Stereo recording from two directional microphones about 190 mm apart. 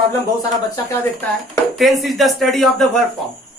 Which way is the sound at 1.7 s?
Centre (ahead or behind).